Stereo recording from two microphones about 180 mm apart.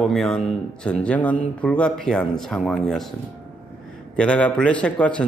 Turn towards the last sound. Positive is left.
turn(degrees=5)  # may be behind; listen again after turning